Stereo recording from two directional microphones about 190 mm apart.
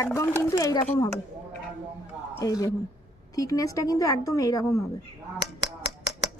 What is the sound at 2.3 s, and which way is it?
A woman's voice, 20° left (ahead or behind).